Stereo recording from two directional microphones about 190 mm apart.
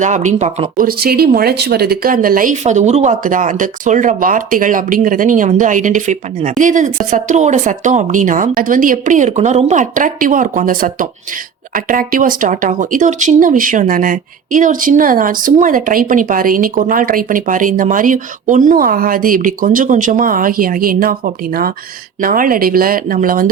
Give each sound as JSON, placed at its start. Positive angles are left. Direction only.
{"t": 0.0, "sound": "speech", "side_deg": -40}
{"t": 0.9, "sound": "speech", "side_deg": -55}